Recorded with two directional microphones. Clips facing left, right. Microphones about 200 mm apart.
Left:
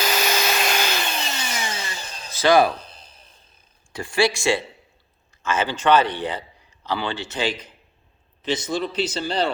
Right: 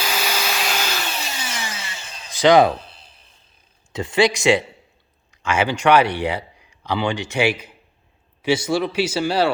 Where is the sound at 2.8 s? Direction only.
40° left (ahead or behind).